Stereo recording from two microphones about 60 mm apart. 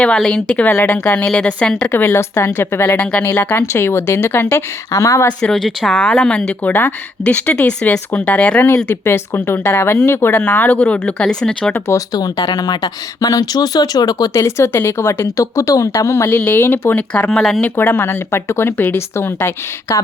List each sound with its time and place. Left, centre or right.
0.0 s a woman's voice: centre
2.0 s a woman's voice: left
3.0 s speech: left
3.7 s a woman's voice: left
4.9 s a woman's voice: left
5.4 s a woman's voice: centre
6.7 s speech: left
9.0 s a woman's voice: left
10.4 s speech: left
11.9 s speech: left
14.4 s a woman's voice: left
16.4 s a woman's voice: left
17.6 s a woman's voice: left